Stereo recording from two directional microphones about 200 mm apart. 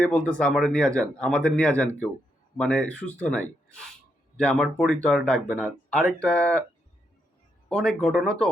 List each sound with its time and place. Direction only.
0.0 s speech: 5° left (ahead or behind)
7.7 s speech: 5° left (ahead or behind)